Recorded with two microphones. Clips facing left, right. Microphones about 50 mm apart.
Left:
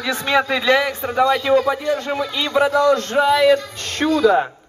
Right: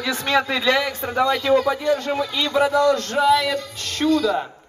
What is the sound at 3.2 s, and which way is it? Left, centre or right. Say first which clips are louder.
Music: left 4 dB; left.